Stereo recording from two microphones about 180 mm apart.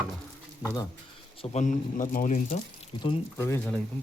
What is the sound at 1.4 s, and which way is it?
Speech, 40° left (ahead or behind).